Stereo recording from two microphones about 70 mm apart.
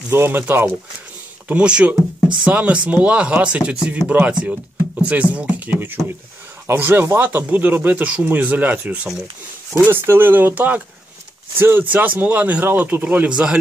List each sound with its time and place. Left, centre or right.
0.1 s speech: right
1.5 s speech: centre
9.8 s speech: right
13.3 s speech: centre